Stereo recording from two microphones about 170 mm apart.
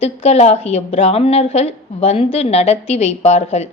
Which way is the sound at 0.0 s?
40° left (ahead or behind).